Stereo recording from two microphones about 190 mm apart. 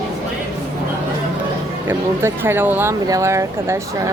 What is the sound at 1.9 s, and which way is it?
Speech, 10° right (ahead or behind).